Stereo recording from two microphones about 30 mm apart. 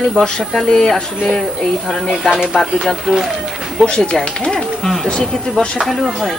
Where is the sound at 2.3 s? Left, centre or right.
Right.